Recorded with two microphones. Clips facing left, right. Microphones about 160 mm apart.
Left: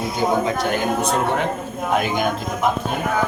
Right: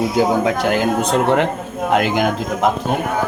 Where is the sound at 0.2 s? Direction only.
90° right.